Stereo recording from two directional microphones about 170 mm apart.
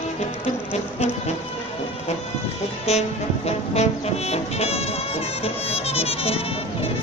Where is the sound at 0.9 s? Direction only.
40° left (ahead or behind).